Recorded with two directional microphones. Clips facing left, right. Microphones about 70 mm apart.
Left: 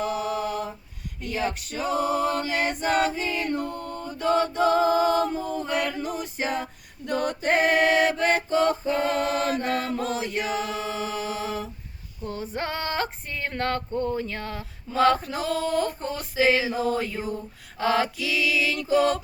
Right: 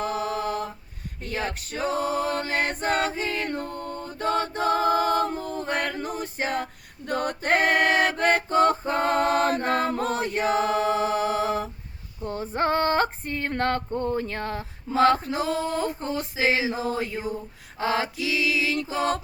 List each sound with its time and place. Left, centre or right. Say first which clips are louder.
0.0 s mantra: even; right
1.2 s a capella: left 2 dB; right
4.2 s choir: left 3 dB; right
12.2 s female singing: right 5 dB; right